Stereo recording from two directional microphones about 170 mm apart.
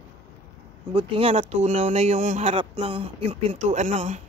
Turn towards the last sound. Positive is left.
turn(degrees=-45)  # may be behind; listen again after turning